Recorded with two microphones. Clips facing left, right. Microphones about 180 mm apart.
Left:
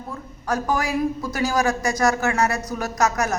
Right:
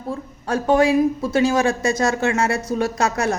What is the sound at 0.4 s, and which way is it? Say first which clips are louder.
A man's voice: right 7 dB; 30° right (ahead or behind).